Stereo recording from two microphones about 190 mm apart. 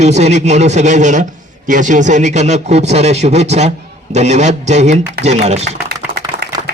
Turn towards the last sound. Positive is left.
turn(degrees=-25)  # may be behind; listen again after turning